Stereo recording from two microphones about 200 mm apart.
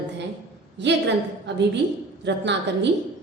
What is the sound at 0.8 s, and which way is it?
A woman's voice, 60° right (ahead or behind).